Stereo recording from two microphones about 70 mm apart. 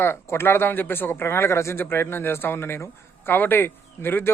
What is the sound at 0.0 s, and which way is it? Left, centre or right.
A man's voice, left.